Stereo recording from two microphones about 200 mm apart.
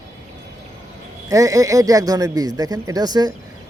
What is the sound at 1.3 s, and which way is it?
Speech, 15° right (ahead or behind).